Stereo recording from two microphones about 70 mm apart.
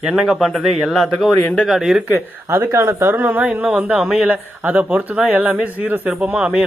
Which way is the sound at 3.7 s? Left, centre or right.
Centre.